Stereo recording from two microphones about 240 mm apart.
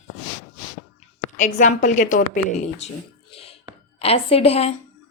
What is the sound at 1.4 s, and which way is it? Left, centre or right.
A woman's voice, left.